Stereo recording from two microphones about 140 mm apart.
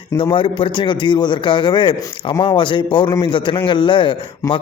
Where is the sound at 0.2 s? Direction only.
35° left (ahead or behind).